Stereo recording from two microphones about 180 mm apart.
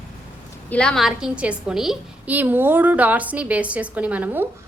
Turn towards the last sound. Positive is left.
turn(degrees=-10)  # may be behind; listen again after turning